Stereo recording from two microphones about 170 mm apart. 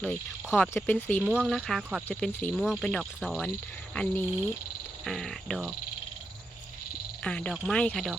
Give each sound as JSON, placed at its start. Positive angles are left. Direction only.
{"t": 0.5, "sound": "speech", "side_deg": 10}
{"t": 1.2, "sound": "cricket", "side_deg": -5}
{"t": 2.0, "sound": "cricket", "side_deg": 5}
{"t": 3.9, "sound": "speech", "side_deg": 10}
{"t": 5.0, "sound": "cricket", "side_deg": 0}
{"t": 7.3, "sound": "cricket", "side_deg": 5}